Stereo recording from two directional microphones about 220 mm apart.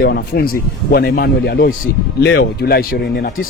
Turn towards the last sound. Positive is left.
turn(degrees=45)  # may be behind; listen again after turning